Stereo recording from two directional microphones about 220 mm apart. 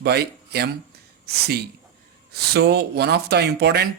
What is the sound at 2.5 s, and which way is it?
Speech, 45° right (ahead or behind).